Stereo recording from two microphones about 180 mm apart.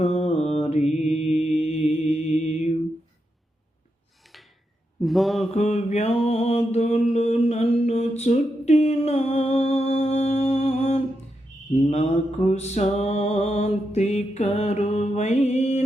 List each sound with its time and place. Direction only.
0.0 s mantra: 35° left (ahead or behind)
4.9 s a sound: centre (ahead or behind)
5.5 s mantra: 40° left (ahead or behind)
12.5 s music: 40° left (ahead or behind)